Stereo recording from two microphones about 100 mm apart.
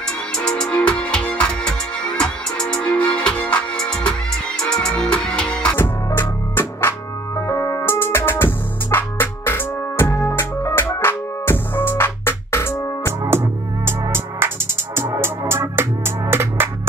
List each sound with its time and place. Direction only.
0.4 s music: 10° left (ahead or behind)
5.8 s music: 20° left (ahead or behind)
13.8 s music: 25° right (ahead or behind)